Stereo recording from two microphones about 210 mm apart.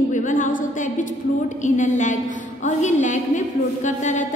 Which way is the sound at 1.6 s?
35° left (ahead or behind).